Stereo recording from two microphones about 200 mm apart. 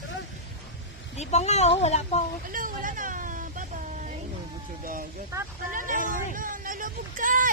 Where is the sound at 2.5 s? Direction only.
40° right (ahead or behind).